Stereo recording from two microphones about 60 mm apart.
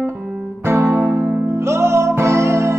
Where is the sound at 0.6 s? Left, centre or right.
Right.